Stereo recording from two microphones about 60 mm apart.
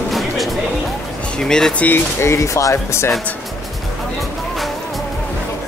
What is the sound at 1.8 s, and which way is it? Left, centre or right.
Speech, left.